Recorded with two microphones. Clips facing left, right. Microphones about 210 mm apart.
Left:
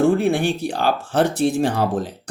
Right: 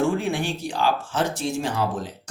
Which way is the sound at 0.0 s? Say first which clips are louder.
Left 6 dB; 60° left (ahead or behind).